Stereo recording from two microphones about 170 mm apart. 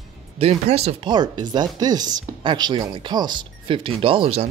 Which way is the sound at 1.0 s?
25° right (ahead or behind).